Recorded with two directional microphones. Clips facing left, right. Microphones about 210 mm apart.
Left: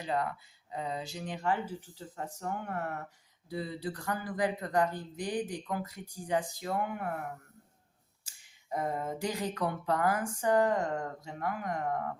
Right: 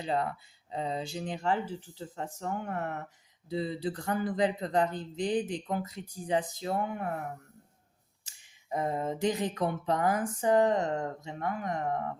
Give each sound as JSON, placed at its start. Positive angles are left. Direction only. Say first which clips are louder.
{"t": 0.0, "sound": "speech", "louder": "right 2 dB", "side_deg": -25}
{"t": 8.7, "sound": "speech", "louder": "right 2 dB", "side_deg": -20}